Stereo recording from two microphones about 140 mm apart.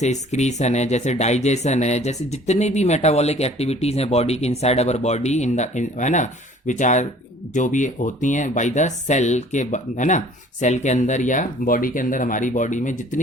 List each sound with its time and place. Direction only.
0.0 s speech: 55° left (ahead or behind)